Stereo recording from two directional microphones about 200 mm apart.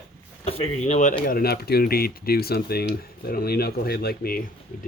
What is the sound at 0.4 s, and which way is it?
Speech, 30° left (ahead or behind).